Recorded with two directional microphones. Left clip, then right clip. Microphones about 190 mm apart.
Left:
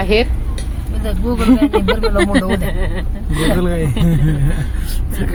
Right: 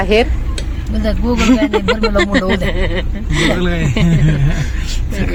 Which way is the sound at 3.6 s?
20° left (ahead or behind).